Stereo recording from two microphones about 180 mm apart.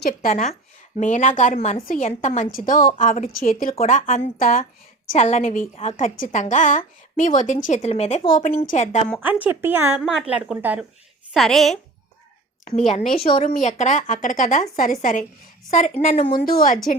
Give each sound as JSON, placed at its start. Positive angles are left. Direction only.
{"t": 0.0, "sound": "a woman's voice", "side_deg": 50}
{"t": 9.2, "sound": "a woman's voice", "side_deg": -10}
{"t": 12.7, "sound": "a woman's voice", "side_deg": 35}
{"t": 16.4, "sound": "a woman's voice", "side_deg": 55}